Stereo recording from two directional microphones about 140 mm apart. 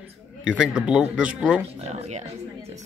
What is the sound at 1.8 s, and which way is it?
Speech, 55° right (ahead or behind).